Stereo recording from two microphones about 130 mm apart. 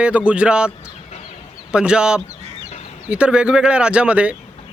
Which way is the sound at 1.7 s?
5° right (ahead or behind).